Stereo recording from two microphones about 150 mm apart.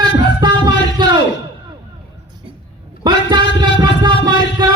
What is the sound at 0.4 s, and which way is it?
Music, 30° right (ahead or behind).